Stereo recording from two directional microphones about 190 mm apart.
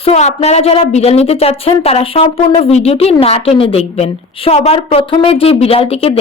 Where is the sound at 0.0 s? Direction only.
35° left (ahead or behind).